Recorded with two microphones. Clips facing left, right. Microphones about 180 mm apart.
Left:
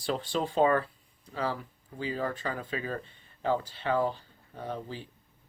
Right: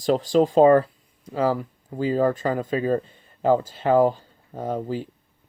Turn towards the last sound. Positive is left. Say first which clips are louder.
# right 10 dB
turn(degrees=-45)  # may be behind; listen again after turning